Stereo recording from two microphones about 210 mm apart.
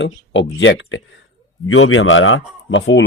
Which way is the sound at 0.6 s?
60° left (ahead or behind).